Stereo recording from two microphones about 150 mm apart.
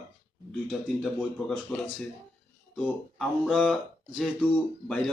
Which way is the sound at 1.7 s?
10° left (ahead or behind).